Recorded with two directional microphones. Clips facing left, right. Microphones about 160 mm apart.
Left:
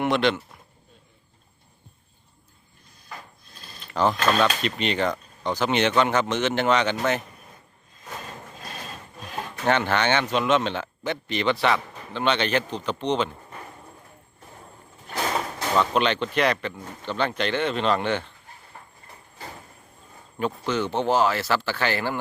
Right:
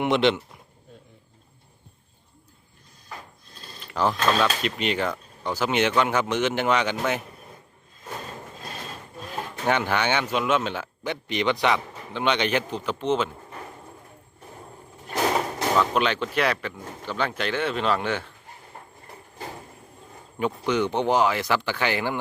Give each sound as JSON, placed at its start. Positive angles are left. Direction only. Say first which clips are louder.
{"t": 0.0, "sound": "speech", "louder": "right 1 dB", "side_deg": -20}
{"t": 3.8, "sound": "mechanisms", "louder": "left 2 dB", "side_deg": -10}
{"t": 4.1, "sound": "speech", "louder": "right 1 dB", "side_deg": 5}
{"t": 4.6, "sound": "speech", "louder": "left 1 dB", "side_deg": -10}
{"t": 9.6, "sound": "speech", "louder": "left 2 dB", "side_deg": -10}
{"t": 15.7, "sound": "speech", "louder": "left 1 dB", "side_deg": -5}
{"t": 20.4, "sound": "speech", "louder": "right 2 dB", "side_deg": -15}